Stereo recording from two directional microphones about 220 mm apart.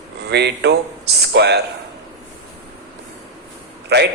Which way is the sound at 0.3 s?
50° right (ahead or behind).